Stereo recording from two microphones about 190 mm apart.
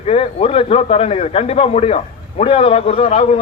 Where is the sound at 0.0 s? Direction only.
30° left (ahead or behind).